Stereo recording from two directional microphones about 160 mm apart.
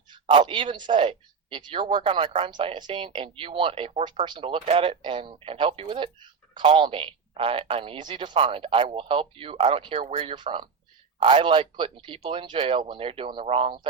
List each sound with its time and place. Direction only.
0.1 s speech: 30° right (ahead or behind)